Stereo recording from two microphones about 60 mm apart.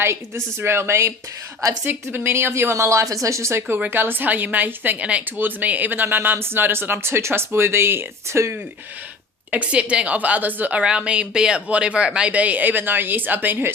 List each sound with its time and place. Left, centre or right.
0.0 s speech: right
1.8 s speech: right
3.8 s speech: right
9.5 s speech: right
10.8 s speech: centre; by 13.7 s right